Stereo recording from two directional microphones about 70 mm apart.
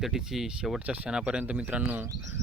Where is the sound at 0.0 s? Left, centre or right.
Centre.